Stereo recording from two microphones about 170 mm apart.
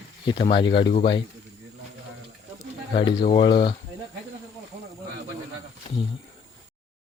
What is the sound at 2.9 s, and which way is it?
Speech, 30° left (ahead or behind).